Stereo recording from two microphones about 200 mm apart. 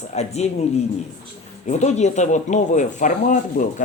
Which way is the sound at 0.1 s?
35° left (ahead or behind).